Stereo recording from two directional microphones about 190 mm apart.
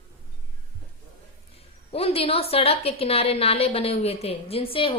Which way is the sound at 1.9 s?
30° left (ahead or behind).